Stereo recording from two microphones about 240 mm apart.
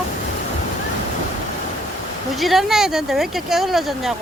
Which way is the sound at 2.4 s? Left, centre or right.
Centre.